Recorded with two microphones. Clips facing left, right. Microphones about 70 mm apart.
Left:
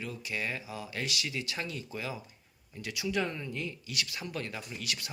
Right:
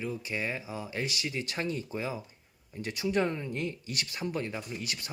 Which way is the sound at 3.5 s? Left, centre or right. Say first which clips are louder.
Right 2 dB; right.